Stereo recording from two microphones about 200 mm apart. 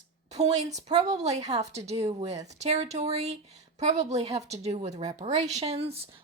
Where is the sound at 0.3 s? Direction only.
35° right (ahead or behind).